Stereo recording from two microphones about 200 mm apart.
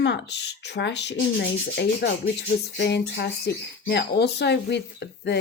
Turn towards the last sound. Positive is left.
turn(degrees=60)  # may be behind; listen again after turning